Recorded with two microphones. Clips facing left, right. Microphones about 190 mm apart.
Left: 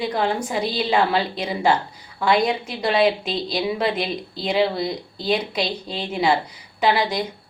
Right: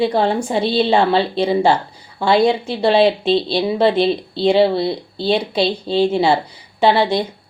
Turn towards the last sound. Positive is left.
turn(degrees=-30)  # may be behind; listen again after turning